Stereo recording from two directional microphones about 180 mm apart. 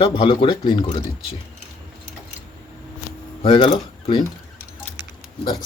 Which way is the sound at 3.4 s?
30° left (ahead or behind).